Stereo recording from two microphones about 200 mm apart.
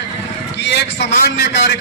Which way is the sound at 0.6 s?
60° left (ahead or behind).